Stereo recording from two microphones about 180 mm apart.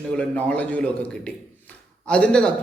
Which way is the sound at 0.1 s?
5° left (ahead or behind).